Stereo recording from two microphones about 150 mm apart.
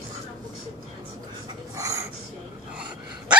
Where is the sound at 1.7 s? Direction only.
20° right (ahead or behind).